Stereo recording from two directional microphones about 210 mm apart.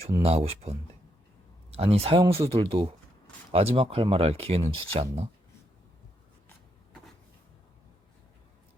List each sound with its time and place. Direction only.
0.2 s speech: 30° right (ahead or behind)